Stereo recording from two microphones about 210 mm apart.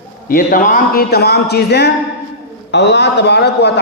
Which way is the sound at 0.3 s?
40° left (ahead or behind).